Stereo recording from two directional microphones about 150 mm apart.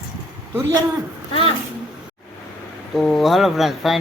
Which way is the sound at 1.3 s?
40° left (ahead or behind).